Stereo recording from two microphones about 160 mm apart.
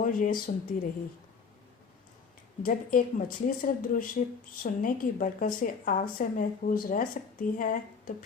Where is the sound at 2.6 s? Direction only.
60° left (ahead or behind).